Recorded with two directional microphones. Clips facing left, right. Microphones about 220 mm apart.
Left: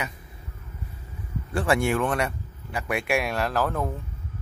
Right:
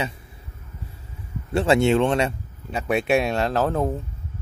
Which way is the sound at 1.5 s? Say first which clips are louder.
Right 5 dB; 25° right (ahead or behind).